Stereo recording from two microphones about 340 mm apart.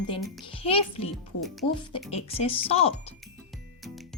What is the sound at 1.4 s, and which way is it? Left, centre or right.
Speech, centre.